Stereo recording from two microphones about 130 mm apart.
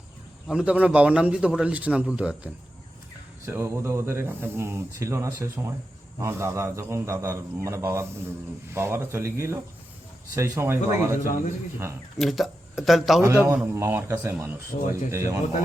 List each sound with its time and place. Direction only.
0.4 s a man's voice: 5° right (ahead or behind)
3.4 s speech: 20° right (ahead or behind)
12.1 s a man's voice: centre (ahead or behind); by 14.5 s 20° right (ahead or behind)
14.7 s speech: 75° left (ahead or behind)
15.1 s speech: 20° right (ahead or behind)